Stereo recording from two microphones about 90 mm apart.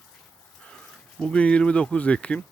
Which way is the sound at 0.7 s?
10° left (ahead or behind).